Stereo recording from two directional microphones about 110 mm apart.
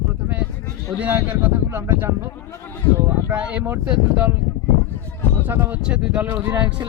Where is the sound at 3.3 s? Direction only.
10° right (ahead or behind).